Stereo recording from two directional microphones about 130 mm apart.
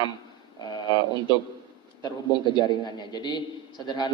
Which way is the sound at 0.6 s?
35° left (ahead or behind).